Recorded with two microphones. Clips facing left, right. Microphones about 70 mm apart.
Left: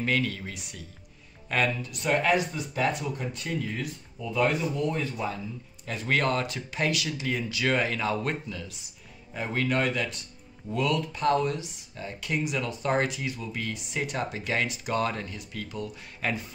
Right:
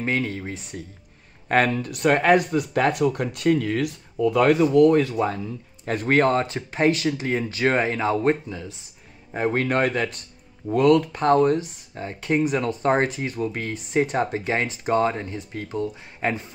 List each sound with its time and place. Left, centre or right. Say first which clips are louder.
0.0 s speech: right 3 dB; right
1.5 s speech: right 7 dB; right
5.9 s speech: right 7 dB; right
9.3 s speech: right 6 dB; right